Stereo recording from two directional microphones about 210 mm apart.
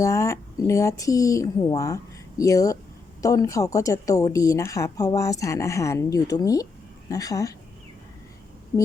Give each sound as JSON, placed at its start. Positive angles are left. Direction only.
{"t": 0.0, "sound": "a woman's voice", "side_deg": 15}